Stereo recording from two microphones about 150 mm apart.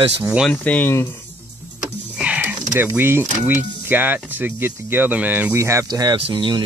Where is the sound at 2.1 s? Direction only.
10° right (ahead or behind).